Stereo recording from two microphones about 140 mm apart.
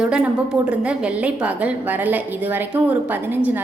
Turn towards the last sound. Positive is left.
turn(degrees=-15)  # may be behind; listen again after turning